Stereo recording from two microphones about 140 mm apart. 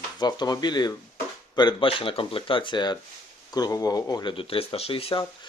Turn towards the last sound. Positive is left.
turn(degrees=40)  # may be behind; listen again after turning